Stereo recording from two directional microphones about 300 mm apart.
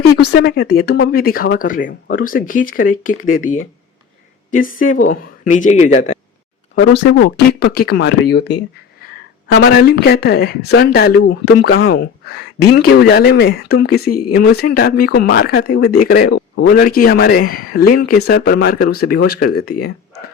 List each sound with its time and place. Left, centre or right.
0.2 s speech: left
6.7 s speech: left